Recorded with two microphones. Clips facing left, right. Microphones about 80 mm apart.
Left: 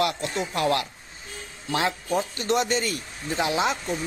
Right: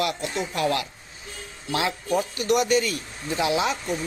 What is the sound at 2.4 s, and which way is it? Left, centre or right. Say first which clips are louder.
Speech: right 4 dB; left.